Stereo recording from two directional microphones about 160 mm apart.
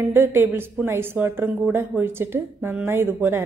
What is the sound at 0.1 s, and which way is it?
Speech, 15° right (ahead or behind).